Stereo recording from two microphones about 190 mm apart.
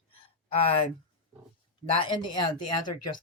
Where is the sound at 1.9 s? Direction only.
25° left (ahead or behind).